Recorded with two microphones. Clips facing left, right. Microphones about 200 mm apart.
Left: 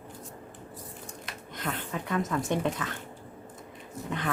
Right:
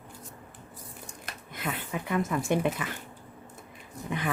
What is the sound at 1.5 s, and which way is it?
Speech, 10° right (ahead or behind).